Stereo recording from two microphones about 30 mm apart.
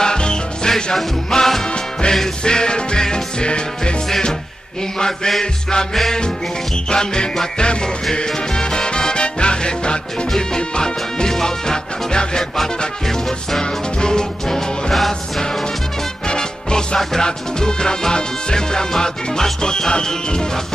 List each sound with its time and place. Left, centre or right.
0.0 s music: left
1.4 s music: centre
1.7 s music: left
4.9 s music: left
6.9 s music: left
13.0 s music: centre
13.6 s music: left
15.0 s music: centre
16.3 s music: left